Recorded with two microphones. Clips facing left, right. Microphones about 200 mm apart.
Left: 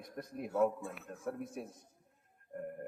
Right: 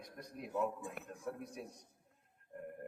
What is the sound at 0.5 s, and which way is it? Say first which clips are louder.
Speech: left 6 dB; 15° right (ahead or behind).